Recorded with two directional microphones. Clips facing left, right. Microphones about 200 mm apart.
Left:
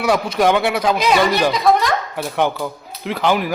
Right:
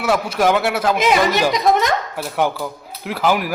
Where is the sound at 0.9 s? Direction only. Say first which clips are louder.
Even; 20° right (ahead or behind).